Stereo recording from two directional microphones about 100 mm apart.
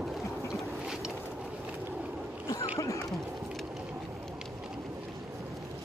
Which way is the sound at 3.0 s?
Centre (ahead or behind).